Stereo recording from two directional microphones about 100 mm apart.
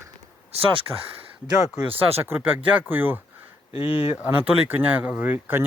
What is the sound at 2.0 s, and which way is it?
Speech, 25° right (ahead or behind).